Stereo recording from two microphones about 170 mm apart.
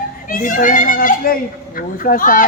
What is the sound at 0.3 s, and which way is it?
A child's voice, 55° left (ahead or behind).